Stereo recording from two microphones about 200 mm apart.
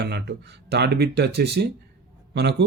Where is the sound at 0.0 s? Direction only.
55° right (ahead or behind).